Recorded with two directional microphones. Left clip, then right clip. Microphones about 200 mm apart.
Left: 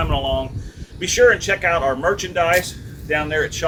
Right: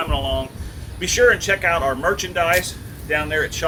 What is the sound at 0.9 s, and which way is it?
Speech, centre (ahead or behind).